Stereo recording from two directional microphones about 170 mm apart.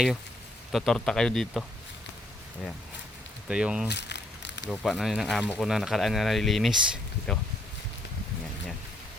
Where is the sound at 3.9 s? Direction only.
85° left.